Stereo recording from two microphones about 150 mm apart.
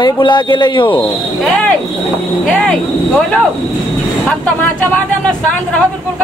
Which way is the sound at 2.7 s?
5° left (ahead or behind).